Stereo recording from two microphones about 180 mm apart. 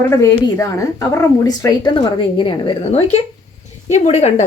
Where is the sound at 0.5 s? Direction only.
15° left (ahead or behind).